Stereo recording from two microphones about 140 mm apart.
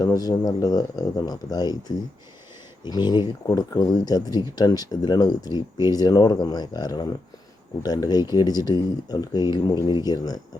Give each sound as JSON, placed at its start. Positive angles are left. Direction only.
{"t": 0.0, "sound": "speech", "side_deg": 25}
{"t": 2.8, "sound": "speech", "side_deg": 30}